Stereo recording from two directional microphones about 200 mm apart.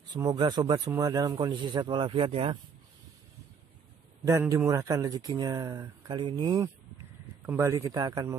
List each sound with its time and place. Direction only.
0.1 s speech: 20° right (ahead or behind)
4.2 s a man's voice: 15° right (ahead or behind)